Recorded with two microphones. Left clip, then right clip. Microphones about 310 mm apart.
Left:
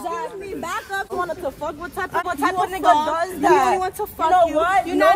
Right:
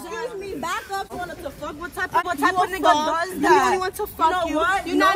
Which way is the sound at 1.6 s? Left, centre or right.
Left.